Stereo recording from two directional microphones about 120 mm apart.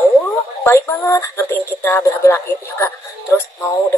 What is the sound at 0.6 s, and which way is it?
Speech, 20° left (ahead or behind).